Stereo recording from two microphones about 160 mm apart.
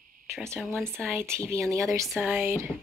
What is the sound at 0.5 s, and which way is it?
Speech, 5° left (ahead or behind).